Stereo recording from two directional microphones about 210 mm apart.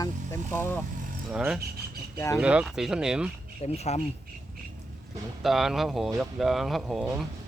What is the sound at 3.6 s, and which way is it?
Speech, 30° left (ahead or behind).